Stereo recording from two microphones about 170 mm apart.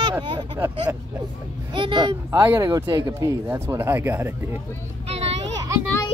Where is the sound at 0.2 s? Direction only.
25° right (ahead or behind).